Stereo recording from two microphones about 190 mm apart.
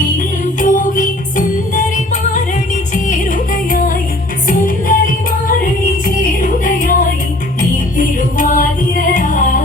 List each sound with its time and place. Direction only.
0.2 s music: 45° left (ahead or behind)
2.9 s music: 45° left (ahead or behind)